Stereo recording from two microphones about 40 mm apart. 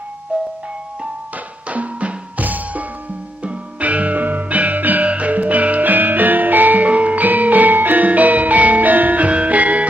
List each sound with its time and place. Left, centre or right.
0.3 s music: right
1.7 s music: right
5.0 s music: right
6.9 s music: right